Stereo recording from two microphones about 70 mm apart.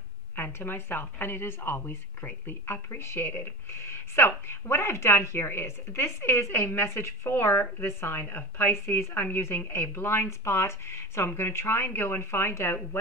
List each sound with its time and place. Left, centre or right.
0.4 s a woman's voice: left